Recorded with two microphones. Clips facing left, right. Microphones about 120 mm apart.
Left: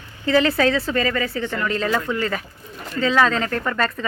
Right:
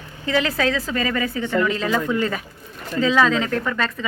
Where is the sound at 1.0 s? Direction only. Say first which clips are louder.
Even; 15° right (ahead or behind).